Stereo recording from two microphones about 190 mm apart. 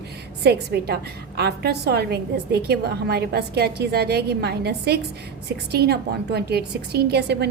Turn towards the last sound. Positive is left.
turn(degrees=-60)  # may be behind; listen again after turning